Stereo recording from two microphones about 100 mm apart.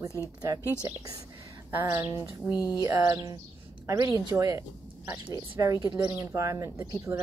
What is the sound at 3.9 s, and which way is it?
Speech, 35° right (ahead or behind).